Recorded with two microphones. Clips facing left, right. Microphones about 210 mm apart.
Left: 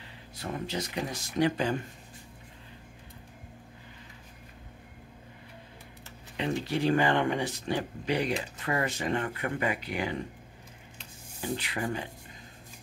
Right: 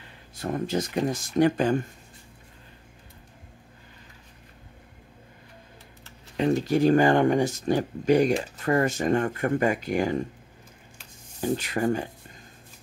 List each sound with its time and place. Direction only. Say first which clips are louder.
0.4 s speech: right 7 dB; 45° right (ahead or behind)
6.3 s speech: right 8 dB; 45° right (ahead or behind)
11.4 s speech: right 8 dB; 45° right (ahead or behind)